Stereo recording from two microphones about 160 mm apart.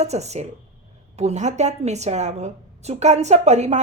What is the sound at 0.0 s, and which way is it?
A woman's voice, 45° right (ahead or behind).